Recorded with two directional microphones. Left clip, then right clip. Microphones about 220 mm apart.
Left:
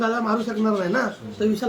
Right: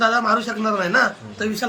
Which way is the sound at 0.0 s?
15° left (ahead or behind).